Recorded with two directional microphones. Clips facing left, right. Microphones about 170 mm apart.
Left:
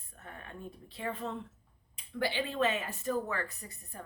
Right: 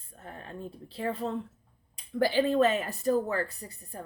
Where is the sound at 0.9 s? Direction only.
35° right (ahead or behind).